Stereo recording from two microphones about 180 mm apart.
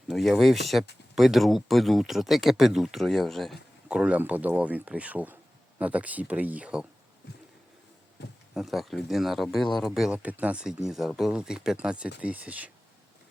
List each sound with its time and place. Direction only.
0.1 s speech: centre (ahead or behind)
8.2 s a sound: 70° left (ahead or behind)
8.5 s speech: centre (ahead or behind)